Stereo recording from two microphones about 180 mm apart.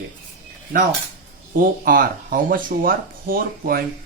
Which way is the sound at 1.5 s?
50° right (ahead or behind).